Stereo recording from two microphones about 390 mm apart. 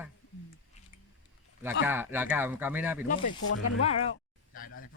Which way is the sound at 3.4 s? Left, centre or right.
Left.